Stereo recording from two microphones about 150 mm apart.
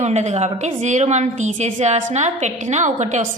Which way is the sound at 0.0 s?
50° right (ahead or behind).